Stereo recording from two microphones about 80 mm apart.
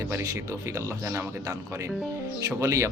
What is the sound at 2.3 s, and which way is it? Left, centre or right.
Speech, right.